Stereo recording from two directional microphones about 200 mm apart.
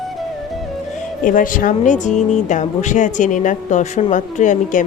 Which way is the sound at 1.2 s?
40° left (ahead or behind).